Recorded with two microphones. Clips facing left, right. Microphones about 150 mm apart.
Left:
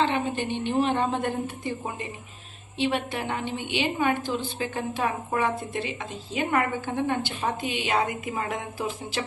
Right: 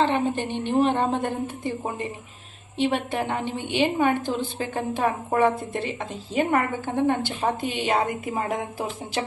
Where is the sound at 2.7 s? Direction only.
45° right (ahead or behind).